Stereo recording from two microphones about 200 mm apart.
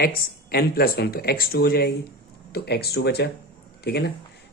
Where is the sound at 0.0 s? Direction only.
50° left (ahead or behind).